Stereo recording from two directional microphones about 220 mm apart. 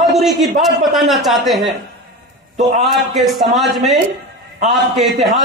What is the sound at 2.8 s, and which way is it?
A man's voice, centre (ahead or behind).